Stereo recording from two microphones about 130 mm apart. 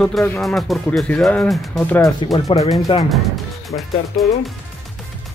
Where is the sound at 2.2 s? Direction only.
40° left (ahead or behind).